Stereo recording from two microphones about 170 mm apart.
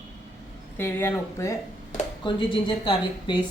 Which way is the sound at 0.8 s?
15° left (ahead or behind).